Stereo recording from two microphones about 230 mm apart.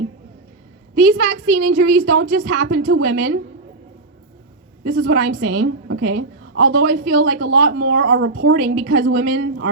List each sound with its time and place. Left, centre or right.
0.9 s a woman's voice: right
1.7 s a woman's voice: right
4.8 s a woman's voice: right
8.6 s a woman's voice: right